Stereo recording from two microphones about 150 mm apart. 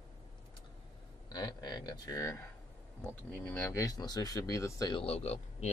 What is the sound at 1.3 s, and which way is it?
Speech, 30° left (ahead or behind).